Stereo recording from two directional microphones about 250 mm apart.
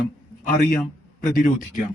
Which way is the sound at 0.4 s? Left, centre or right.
Left.